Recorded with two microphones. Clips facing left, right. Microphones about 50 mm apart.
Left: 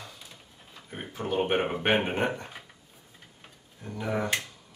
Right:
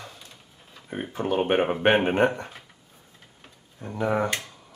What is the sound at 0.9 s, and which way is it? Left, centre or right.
Speech, right.